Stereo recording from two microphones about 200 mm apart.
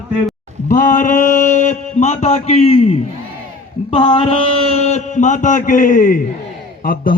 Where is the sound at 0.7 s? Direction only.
40° left (ahead or behind).